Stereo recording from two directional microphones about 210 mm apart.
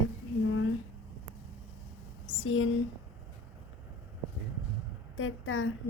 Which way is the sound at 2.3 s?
75° left (ahead or behind).